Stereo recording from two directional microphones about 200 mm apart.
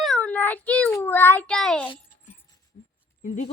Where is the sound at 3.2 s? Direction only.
35° left (ahead or behind).